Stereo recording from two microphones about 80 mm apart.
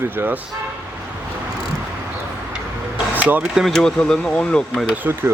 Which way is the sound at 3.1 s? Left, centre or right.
Right.